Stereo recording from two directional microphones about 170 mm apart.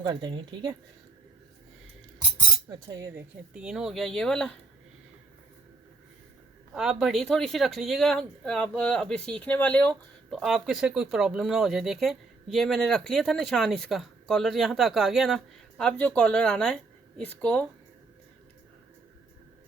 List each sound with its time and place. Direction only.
0.0 s speech: 25° right (ahead or behind)
2.6 s speech: 20° right (ahead or behind)
3.5 s speech: 5° right (ahead or behind)
6.7 s speech: centre (ahead or behind)